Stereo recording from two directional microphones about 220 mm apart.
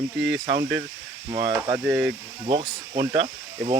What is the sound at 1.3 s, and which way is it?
Speech, 20° right (ahead or behind).